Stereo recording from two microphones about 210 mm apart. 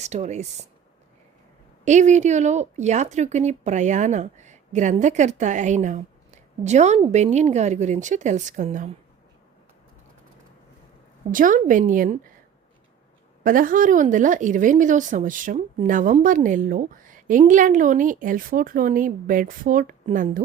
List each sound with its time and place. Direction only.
0.0 s a woman's voice: 30° right (ahead or behind)
1.8 s a woman's voice: 35° right (ahead or behind)
11.3 s a woman's voice: 40° right (ahead or behind)
13.4 s a woman's voice: 40° right (ahead or behind)